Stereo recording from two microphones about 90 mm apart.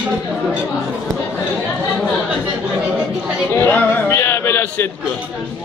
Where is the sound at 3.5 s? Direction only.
30° left (ahead or behind).